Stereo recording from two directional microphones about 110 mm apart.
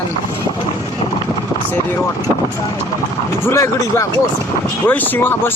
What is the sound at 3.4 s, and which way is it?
Speech, 25° left (ahead or behind).